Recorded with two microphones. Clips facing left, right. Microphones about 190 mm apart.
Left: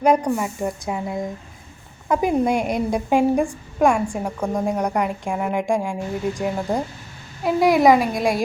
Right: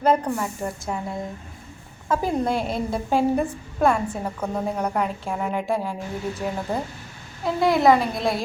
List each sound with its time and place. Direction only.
0.0 s a woman's voice: 15° left (ahead or behind)